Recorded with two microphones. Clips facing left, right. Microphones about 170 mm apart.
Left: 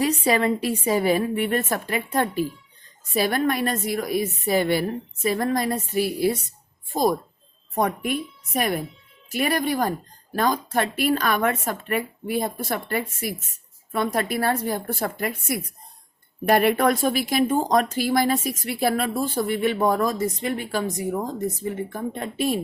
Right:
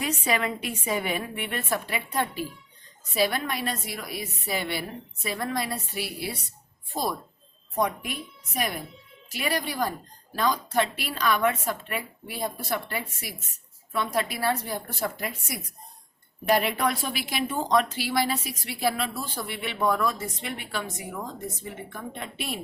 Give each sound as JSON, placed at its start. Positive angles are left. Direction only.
{"t": 0.0, "sound": "a woman's voice", "side_deg": 35}